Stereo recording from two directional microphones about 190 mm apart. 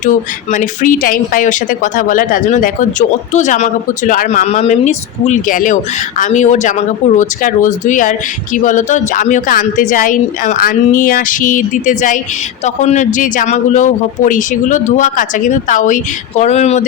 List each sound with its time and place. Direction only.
0.0 s speech: 40° left (ahead or behind)